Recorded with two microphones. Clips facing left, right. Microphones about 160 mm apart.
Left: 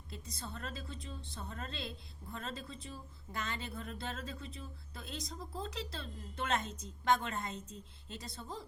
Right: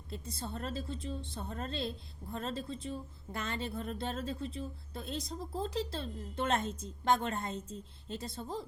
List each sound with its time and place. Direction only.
0.1 s speech: 25° right (ahead or behind)
3.8 s speech: 50° right (ahead or behind)
4.0 s speech: 30° right (ahead or behind)